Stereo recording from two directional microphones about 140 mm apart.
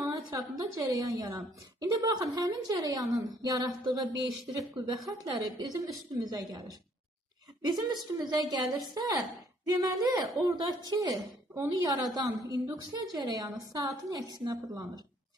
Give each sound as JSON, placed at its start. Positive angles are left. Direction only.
{"t": 0.0, "sound": "a woman's voice", "side_deg": -25}
{"t": 7.6, "sound": "a woman's voice", "side_deg": -30}
{"t": 10.1, "sound": "a woman's voice", "side_deg": -25}